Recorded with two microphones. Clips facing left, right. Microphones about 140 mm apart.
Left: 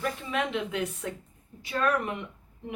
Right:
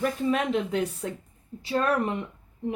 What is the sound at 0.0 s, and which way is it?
Speech, 40° right (ahead or behind).